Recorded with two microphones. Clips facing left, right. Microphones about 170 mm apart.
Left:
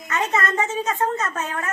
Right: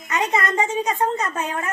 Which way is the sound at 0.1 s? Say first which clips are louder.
Right 1 dB; 15° right (ahead or behind).